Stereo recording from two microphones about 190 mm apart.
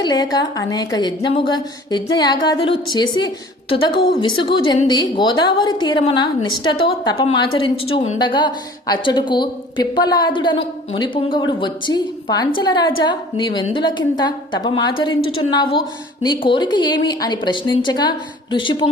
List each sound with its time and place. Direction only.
0.0 s a woman's voice: 20° left (ahead or behind)